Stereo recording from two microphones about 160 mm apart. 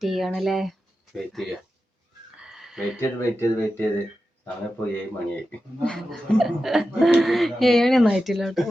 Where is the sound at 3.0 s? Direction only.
15° left (ahead or behind).